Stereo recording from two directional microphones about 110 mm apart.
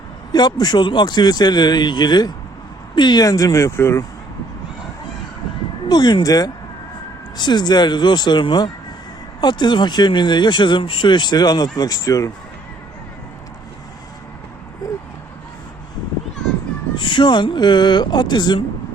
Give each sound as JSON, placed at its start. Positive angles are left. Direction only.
{"t": 0.3, "sound": "a man's voice", "side_deg": 40}
{"t": 5.9, "sound": "speech", "side_deg": 40}
{"t": 16.9, "sound": "speech", "side_deg": 45}